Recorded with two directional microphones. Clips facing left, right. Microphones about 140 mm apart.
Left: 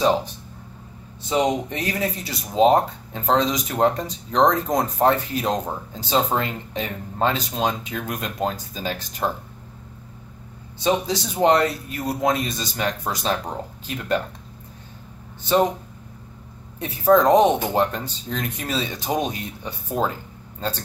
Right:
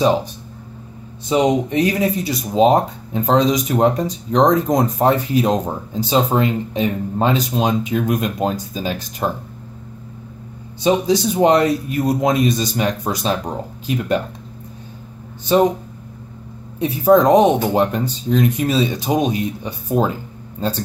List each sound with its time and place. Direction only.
0.0 s speech: 15° right (ahead or behind)
1.3 s speech: 15° right (ahead or behind)
10.8 s speech: 15° right (ahead or behind)
15.4 s speech: 15° right (ahead or behind)
16.8 s speech: 15° right (ahead or behind)